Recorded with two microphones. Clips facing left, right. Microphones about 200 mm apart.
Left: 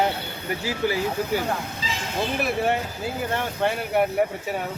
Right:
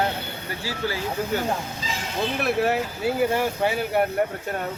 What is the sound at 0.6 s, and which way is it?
Speech, 15° left (ahead or behind).